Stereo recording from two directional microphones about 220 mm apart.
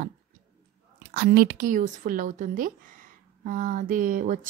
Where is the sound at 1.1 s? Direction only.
45° right (ahead or behind).